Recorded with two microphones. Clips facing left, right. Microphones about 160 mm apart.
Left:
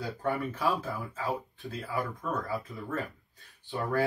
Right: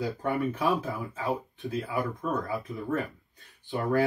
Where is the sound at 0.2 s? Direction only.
20° right (ahead or behind).